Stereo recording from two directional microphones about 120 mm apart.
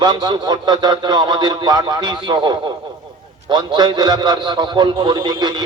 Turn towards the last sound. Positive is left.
turn(degrees=-35)  # may be behind; listen again after turning